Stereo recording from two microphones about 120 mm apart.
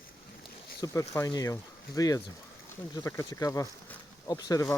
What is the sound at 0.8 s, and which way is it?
Speech, 25° left (ahead or behind).